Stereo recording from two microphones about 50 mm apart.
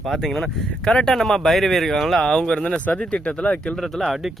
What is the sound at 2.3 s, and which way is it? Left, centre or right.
Speech, centre.